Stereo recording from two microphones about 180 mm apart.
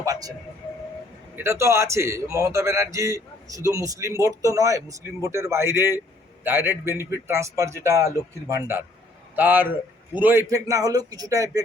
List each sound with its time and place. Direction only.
0.0 s music: 20° right (ahead or behind)
1.4 s a man's voice: 15° right (ahead or behind)